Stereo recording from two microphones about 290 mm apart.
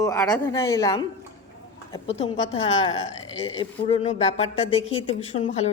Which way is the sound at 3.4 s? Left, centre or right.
Centre.